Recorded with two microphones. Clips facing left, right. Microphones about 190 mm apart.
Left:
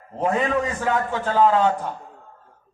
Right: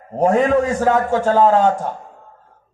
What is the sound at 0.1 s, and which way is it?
A man's voice, 45° right (ahead or behind).